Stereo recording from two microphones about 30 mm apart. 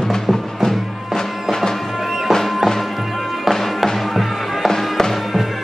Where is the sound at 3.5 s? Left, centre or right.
Centre.